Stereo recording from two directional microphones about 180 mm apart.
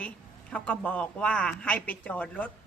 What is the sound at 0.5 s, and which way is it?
A man's voice, 5° left (ahead or behind).